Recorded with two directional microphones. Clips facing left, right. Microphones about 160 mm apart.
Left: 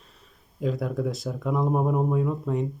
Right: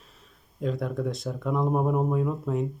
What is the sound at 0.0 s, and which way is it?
Speech, centre (ahead or behind).